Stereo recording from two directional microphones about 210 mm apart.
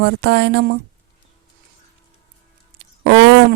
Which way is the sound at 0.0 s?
55° right (ahead or behind).